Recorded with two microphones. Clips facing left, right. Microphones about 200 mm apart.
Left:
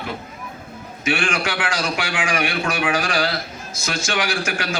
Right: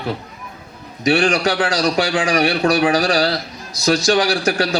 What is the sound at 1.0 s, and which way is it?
A man's voice, 35° right (ahead or behind).